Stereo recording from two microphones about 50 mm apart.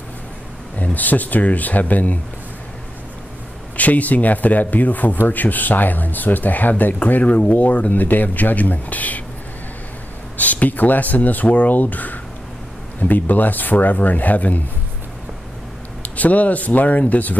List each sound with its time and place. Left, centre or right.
0.9 s speech: left
3.7 s speech: left
10.3 s speech: left
16.0 s speech: left